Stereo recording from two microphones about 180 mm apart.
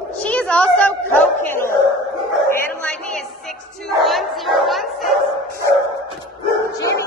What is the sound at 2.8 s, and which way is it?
Speech, 5° left (ahead or behind).